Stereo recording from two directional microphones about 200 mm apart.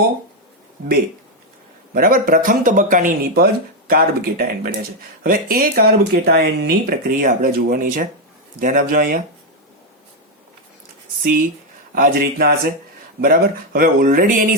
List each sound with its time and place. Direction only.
1.9 s speech: 45° right (ahead or behind)
11.2 s speech: 45° right (ahead or behind)